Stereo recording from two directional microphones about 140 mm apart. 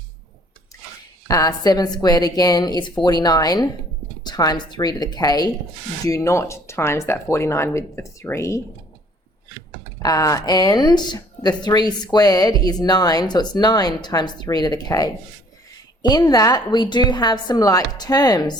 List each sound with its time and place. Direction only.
1.3 s a woman's voice: 25° left (ahead or behind)
10.0 s a woman's voice: 25° left (ahead or behind)